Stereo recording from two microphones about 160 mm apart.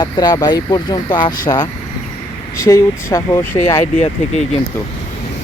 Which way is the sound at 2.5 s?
20° left (ahead or behind).